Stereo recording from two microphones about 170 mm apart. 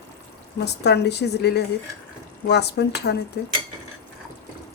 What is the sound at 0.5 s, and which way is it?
Speech, 75° left (ahead or behind).